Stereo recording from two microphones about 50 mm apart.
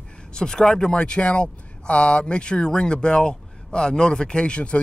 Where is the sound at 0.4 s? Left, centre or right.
Centre.